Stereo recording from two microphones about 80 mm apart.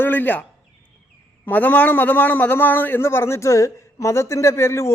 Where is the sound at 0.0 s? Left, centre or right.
Left.